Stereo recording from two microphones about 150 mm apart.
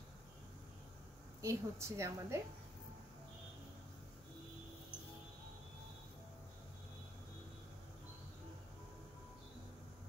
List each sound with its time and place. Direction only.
1.4 s a woman's voice: 20° right (ahead or behind)